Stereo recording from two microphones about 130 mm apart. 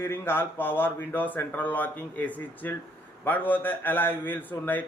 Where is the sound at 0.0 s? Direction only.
15° left (ahead or behind).